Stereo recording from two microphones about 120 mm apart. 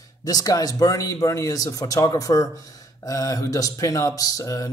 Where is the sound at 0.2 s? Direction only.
30° left (ahead or behind).